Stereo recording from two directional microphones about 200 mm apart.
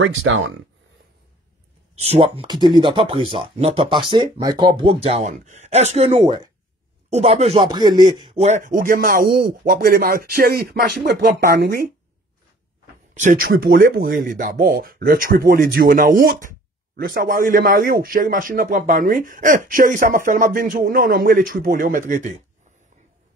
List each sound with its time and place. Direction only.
0.0 s speech: 75° right (ahead or behind)
2.0 s speech: 30° right (ahead or behind)
7.1 s a man's voice: 35° right (ahead or behind); by 11.8 s 50° right (ahead or behind)
13.1 s a man's voice: 40° right (ahead or behind)